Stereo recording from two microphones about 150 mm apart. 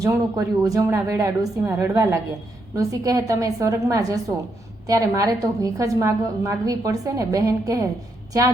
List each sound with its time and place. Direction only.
0.0 s a woman's voice: 25° right (ahead or behind)